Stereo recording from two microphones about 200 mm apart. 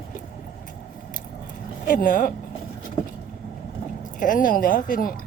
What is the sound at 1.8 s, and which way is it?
Speech, 40° left (ahead or behind).